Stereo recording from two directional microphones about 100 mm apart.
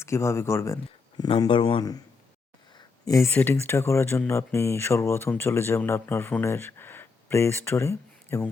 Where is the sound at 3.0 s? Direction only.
35° left (ahead or behind).